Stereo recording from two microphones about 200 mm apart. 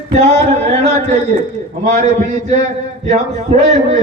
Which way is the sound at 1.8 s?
35° right (ahead or behind).